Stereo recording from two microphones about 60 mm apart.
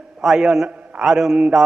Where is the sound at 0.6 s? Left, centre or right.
Right.